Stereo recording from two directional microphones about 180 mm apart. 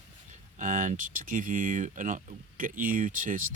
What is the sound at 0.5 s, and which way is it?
Speech, 45° right (ahead or behind).